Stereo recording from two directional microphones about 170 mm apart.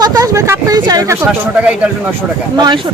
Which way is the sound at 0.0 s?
20° right (ahead or behind).